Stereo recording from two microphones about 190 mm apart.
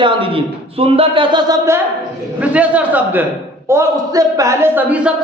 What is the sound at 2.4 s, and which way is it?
Speech, 5° right (ahead or behind).